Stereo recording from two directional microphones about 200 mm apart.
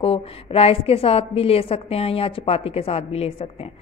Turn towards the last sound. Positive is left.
turn(degrees=30)  # may be behind; listen again after turning